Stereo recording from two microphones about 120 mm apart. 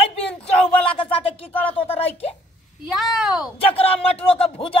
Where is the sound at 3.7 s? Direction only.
50° left (ahead or behind).